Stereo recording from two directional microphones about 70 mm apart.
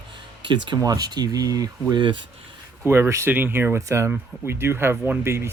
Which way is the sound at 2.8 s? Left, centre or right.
Right.